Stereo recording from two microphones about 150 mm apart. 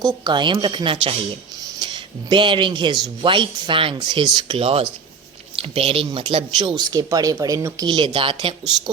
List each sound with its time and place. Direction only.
0.0 s speech: 30° right (ahead or behind)